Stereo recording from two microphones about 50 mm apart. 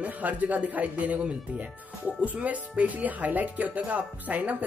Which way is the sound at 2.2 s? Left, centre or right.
Right.